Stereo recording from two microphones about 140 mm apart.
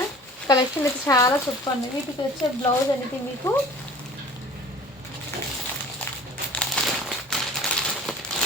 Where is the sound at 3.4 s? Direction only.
20° left (ahead or behind).